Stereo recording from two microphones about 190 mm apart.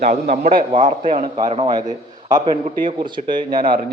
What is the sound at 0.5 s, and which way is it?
A man's voice, 25° right (ahead or behind).